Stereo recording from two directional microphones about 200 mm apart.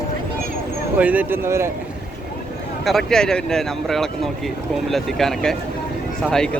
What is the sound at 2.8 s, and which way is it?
A man's voice, centre (ahead or behind).